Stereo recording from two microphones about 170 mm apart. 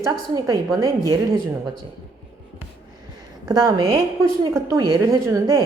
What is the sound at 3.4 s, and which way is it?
Speech, 20° right (ahead or behind).